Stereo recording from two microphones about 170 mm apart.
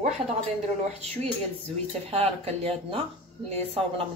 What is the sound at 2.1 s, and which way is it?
Speech, 35° right (ahead or behind).